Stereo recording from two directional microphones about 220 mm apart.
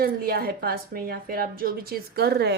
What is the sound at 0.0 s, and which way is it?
A woman's voice, 45° right (ahead or behind).